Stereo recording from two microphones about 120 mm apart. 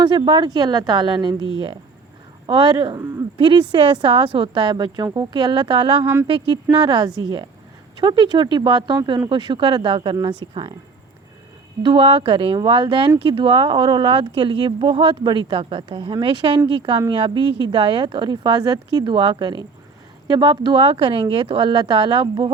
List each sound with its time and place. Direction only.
0.3 s speech: 35° right (ahead or behind)
11.8 s speech: 45° right (ahead or behind)